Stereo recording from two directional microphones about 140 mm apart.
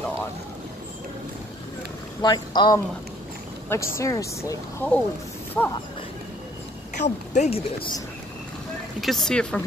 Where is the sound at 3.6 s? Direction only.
20° left (ahead or behind).